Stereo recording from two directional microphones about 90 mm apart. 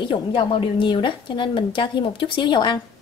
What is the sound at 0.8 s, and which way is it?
Speech, 65° left (ahead or behind).